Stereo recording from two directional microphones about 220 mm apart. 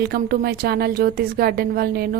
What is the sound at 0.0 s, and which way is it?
A woman's voice, 45° right (ahead or behind).